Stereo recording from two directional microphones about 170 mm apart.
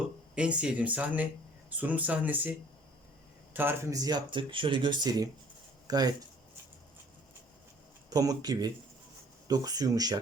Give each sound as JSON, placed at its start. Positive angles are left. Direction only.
{"t": 0.3, "sound": "speech", "side_deg": -5}
{"t": 8.1, "sound": "speech", "side_deg": -20}